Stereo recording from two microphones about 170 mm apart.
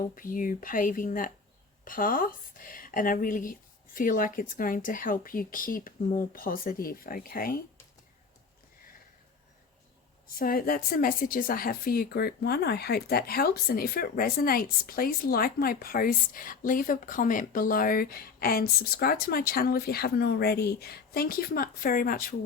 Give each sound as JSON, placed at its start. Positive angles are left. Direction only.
{"t": 0.0, "sound": "a woman's voice", "side_deg": 55}
{"t": 10.2, "sound": "a woman's voice", "side_deg": 60}